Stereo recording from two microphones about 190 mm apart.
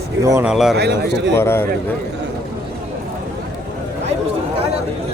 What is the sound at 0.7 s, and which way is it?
Speech, 60° right (ahead or behind).